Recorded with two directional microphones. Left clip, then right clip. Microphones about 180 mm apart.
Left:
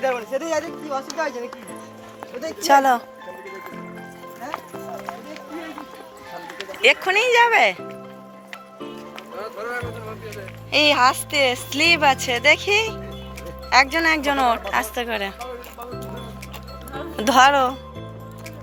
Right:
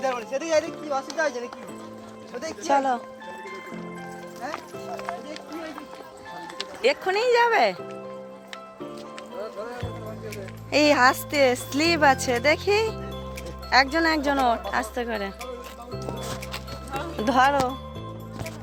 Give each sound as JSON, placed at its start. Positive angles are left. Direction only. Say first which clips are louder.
{"t": 0.0, "sound": "speech", "louder": "left 4 dB", "side_deg": 50}
{"t": 2.6, "sound": "speech", "louder": "left 7 dB", "side_deg": 10}
{"t": 6.8, "sound": "speech", "louder": "left 5 dB", "side_deg": -20}
{"t": 10.7, "sound": "speech", "louder": "left 2 dB", "side_deg": -45}
{"t": 17.0, "sound": "music", "louder": "left 6 dB", "side_deg": -5}